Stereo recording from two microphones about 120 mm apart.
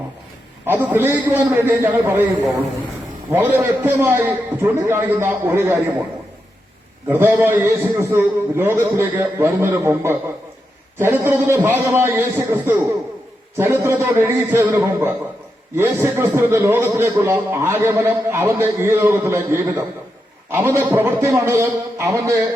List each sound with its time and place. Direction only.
0.6 s a man's voice: 15° right (ahead or behind)
3.3 s a man's voice: 15° right (ahead or behind)
7.1 s a man's voice: 15° right (ahead or behind)